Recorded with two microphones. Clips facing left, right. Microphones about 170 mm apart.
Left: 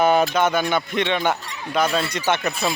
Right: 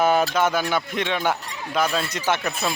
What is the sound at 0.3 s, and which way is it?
Speech, centre (ahead or behind).